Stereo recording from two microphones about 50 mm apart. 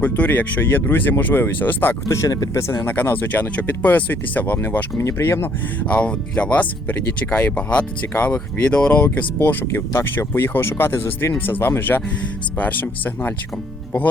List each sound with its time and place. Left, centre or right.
0.0 s speech: left
2.6 s speech: left
2.8 s speech: left
4.9 s speech: left
5.8 s speech: left
8.1 s speech: left
8.6 s speech: left
9.4 s speech: left
9.7 s speech: left
11.3 s speech: left
12.5 s speech: left